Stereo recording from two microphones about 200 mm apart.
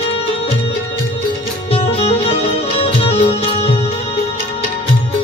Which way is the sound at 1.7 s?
30° left (ahead or behind).